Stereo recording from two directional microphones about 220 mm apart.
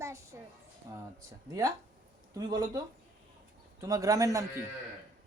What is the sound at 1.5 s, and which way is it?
A woman's voice, 15° right (ahead or behind).